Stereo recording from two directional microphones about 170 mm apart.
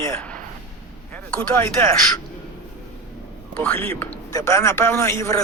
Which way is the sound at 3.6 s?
10° left (ahead or behind).